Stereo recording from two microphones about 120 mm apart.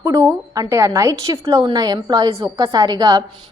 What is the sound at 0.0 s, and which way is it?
A woman's voice, 25° right (ahead or behind).